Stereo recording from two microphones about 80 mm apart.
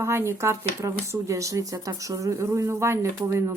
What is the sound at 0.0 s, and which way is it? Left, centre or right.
Speech, right.